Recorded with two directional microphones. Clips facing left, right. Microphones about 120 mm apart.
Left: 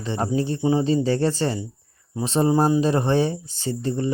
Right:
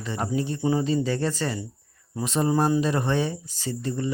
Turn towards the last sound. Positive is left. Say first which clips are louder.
# left 4 dB
turn(degrees=30)  # may be behind; listen again after turning